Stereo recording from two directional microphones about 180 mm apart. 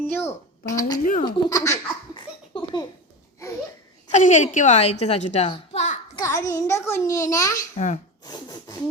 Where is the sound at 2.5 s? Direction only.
25° left (ahead or behind).